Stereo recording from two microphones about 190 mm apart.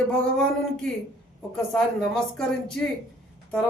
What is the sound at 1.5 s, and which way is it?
Speech, 5° left (ahead or behind).